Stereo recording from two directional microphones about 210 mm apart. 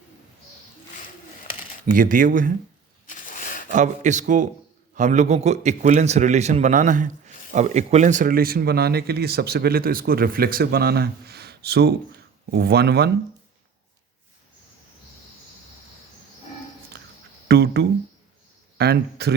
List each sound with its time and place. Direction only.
2.0 s a man's voice: 40° right (ahead or behind)
3.2 s a sound: 40° left (ahead or behind)
3.7 s a man's voice: 35° right (ahead or behind); by 13.1 s 50° right (ahead or behind)
17.5 s speech: 50° right (ahead or behind)